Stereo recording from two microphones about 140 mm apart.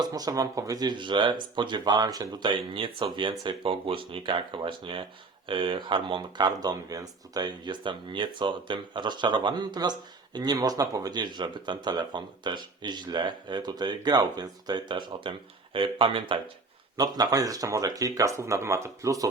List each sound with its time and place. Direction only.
0.0 s speech: 25° right (ahead or behind)
17.0 s speech: 25° right (ahead or behind)